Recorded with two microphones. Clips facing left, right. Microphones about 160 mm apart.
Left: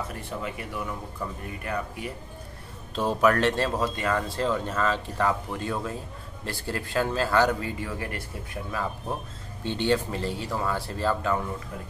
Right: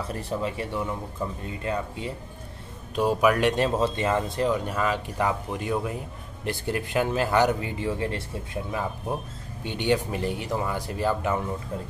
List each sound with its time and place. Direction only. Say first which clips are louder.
0.1 s speech: right 5 dB; 30° right (ahead or behind)
3.0 s speech: right 1 dB; 10° right (ahead or behind)
9.6 s speech: even; 15° right (ahead or behind)